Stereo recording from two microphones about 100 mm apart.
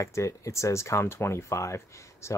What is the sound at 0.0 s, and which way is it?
Speech, 30° left (ahead or behind).